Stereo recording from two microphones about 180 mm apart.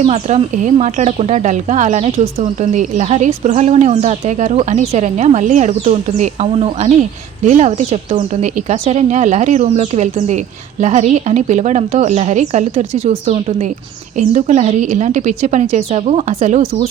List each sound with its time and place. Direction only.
0.0 s speech: 35° right (ahead or behind)